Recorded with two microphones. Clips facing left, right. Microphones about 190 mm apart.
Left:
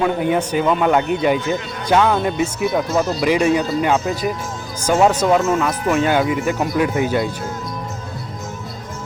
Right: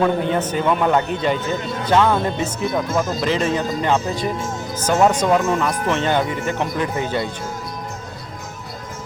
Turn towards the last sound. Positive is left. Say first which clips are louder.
# left 4 dB
turn(degrees=10)  # may be behind; listen again after turning